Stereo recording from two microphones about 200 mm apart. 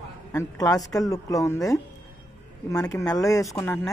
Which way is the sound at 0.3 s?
15° left (ahead or behind).